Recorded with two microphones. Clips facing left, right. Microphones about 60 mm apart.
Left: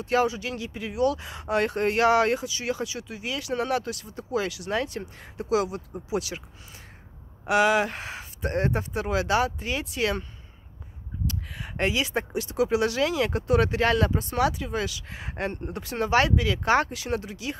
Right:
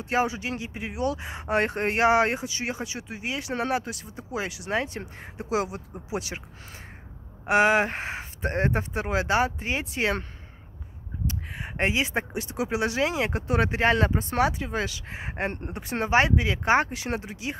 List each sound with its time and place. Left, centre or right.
0.0 s speech: right
7.4 s speech: right
11.2 s speech: right